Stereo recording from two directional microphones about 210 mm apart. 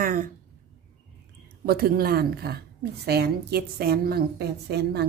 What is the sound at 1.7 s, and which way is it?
A woman's voice, 45° right (ahead or behind).